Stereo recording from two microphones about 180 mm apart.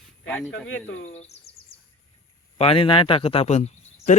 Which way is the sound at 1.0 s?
35° left (ahead or behind).